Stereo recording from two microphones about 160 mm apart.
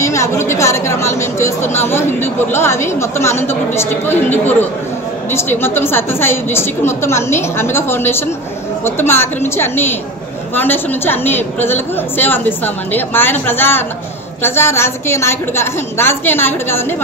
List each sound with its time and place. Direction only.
0.0 s a woman's voice: 15° left (ahead or behind)